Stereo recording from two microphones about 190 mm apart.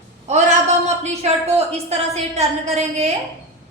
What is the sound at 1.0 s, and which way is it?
A woman's voice, 35° right (ahead or behind).